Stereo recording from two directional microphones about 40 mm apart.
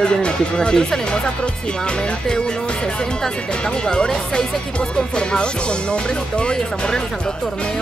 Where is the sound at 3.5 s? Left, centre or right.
Left.